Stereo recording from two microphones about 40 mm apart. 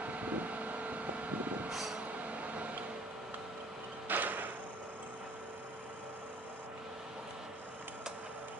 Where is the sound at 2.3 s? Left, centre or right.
Right.